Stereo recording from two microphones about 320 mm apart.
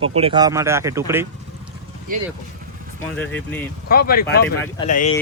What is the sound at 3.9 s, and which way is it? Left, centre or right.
Speech, left.